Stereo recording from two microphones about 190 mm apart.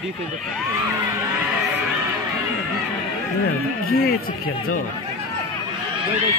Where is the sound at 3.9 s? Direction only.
50° left (ahead or behind).